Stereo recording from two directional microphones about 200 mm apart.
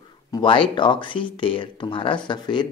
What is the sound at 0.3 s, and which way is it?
Speech, 25° left (ahead or behind).